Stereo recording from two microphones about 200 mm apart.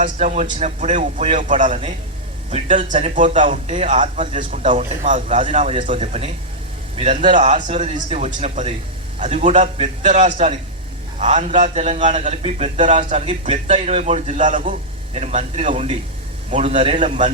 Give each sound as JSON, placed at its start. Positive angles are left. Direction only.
{"t": 0.0, "sound": "a man's voice", "side_deg": -35}